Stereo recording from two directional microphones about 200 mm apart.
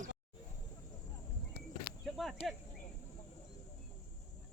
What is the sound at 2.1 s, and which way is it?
Speech, centre (ahead or behind).